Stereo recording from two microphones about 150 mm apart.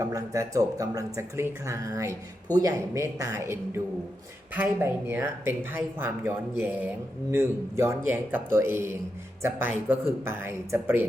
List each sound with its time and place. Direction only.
0.0 s speech: 25° right (ahead or behind)